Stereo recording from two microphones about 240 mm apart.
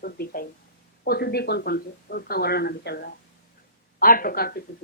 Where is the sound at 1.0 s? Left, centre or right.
Left.